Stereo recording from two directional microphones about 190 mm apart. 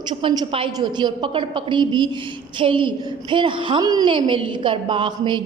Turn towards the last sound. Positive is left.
turn(degrees=-25)  # may be behind; listen again after turning